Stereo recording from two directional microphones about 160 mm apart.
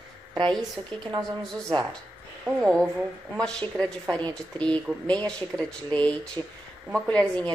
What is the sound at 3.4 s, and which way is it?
A woman's voice, 5° left (ahead or behind).